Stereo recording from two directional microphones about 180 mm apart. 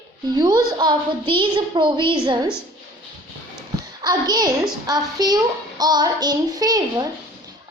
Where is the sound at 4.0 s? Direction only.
20° right (ahead or behind).